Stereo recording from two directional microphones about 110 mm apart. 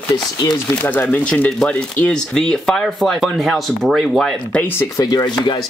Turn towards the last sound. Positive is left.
turn(degrees=40)  # may be behind; listen again after turning